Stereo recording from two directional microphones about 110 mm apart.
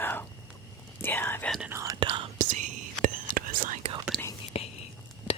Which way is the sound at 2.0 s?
50° right (ahead or behind).